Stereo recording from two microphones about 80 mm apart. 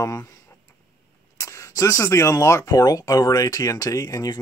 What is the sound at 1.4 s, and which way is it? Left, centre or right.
Speech, left.